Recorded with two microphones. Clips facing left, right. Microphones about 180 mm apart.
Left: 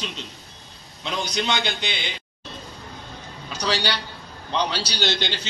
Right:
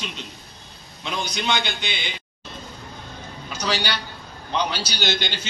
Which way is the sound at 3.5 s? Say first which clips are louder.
Left 1 dB; 35° left (ahead or behind).